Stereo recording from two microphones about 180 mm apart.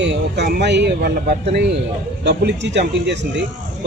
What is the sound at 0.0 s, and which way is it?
A man's voice, 75° right (ahead or behind).